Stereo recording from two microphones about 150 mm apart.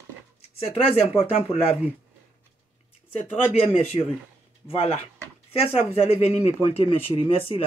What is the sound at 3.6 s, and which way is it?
Speech, 45° left (ahead or behind).